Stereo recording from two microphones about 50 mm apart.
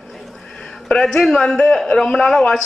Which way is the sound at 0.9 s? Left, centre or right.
Centre.